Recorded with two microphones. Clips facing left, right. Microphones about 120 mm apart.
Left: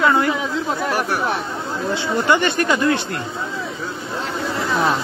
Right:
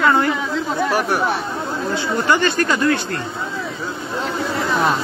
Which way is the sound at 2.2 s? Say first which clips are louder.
Even; 20° left (ahead or behind).